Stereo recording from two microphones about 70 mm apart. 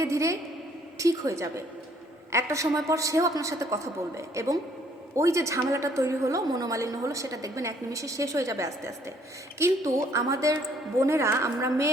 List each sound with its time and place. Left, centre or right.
0.0 s a woman's voice: right
6.5 s a woman's voice: right
6.7 s a woman's voice: right